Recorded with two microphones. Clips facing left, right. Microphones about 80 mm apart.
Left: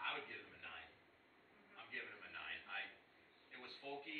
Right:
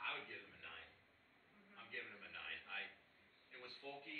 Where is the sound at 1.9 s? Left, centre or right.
Centre.